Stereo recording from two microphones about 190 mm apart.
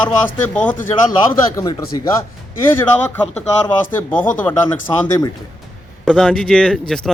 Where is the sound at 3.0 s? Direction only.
10° left (ahead or behind).